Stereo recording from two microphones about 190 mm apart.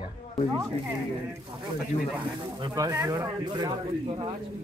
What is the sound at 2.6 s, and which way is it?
Speech, 20° right (ahead or behind).